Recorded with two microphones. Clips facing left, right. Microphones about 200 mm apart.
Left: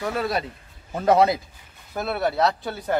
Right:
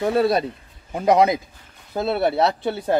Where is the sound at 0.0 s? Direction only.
30° right (ahead or behind).